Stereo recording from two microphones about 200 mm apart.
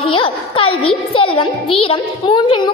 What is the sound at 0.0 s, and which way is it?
A child's voice, 25° left (ahead or behind).